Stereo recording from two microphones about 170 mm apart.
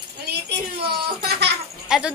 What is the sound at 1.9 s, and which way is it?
Speech, 5° right (ahead or behind).